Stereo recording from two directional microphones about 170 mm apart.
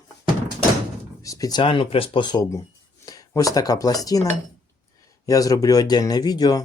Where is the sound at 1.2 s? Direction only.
25° left (ahead or behind).